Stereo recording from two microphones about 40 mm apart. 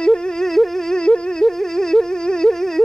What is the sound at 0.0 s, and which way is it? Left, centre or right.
Humming, centre.